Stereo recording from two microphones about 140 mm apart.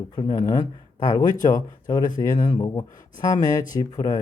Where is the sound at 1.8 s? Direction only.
30° left (ahead or behind).